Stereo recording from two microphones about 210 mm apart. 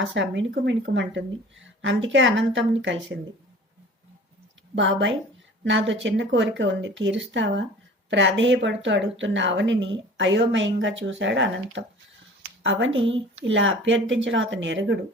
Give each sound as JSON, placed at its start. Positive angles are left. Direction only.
{"t": 0.0, "sound": "speech", "side_deg": -60}
{"t": 4.7, "sound": "speech", "side_deg": -60}